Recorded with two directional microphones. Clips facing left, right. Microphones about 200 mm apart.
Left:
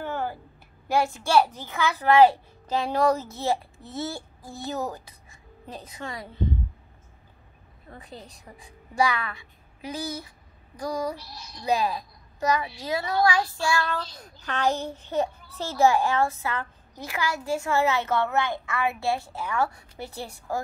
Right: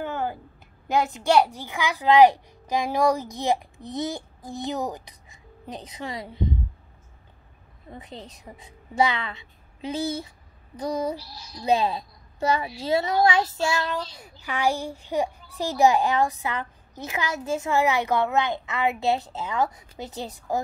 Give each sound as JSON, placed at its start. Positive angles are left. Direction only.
{"t": 0.0, "sound": "a sound", "side_deg": -20}
{"t": 0.8, "sound": "a child's voice", "side_deg": -20}
{"t": 7.9, "sound": "a woman's voice", "side_deg": -20}